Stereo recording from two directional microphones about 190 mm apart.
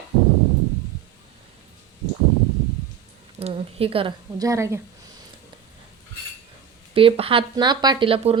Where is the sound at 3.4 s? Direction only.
30° right (ahead or behind).